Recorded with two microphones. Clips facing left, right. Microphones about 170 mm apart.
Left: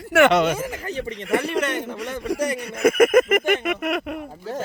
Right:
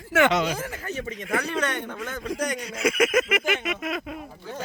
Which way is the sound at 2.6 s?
55° left (ahead or behind).